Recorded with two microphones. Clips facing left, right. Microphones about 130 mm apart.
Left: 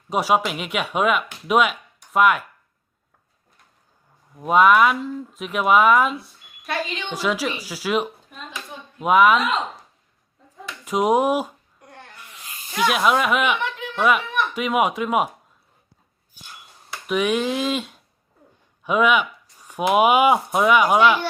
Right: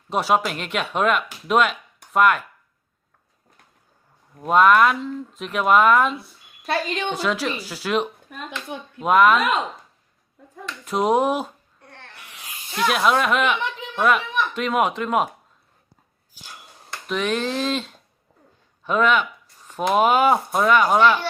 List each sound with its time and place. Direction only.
0.1 s speech: 10° left (ahead or behind)
4.4 s speech: 5° left (ahead or behind)
6.7 s a woman's voice: 45° right (ahead or behind)
7.1 s speech: 10° left (ahead or behind)
8.3 s clapping: 55° right (ahead or behind)
9.0 s speech: 5° left (ahead or behind)
10.7 s a sound: 10° left (ahead or behind)
12.7 s speech: centre (ahead or behind)
16.9 s speech: 10° left (ahead or behind)